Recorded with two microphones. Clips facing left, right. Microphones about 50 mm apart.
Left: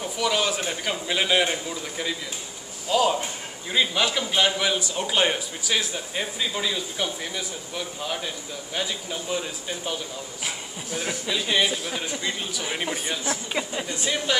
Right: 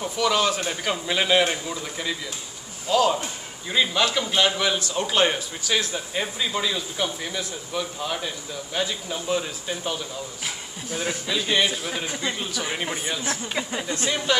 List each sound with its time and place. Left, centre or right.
0.2 s speech: centre
3.7 s a man's voice: centre
10.9 s speech: right
11.2 s speech: centre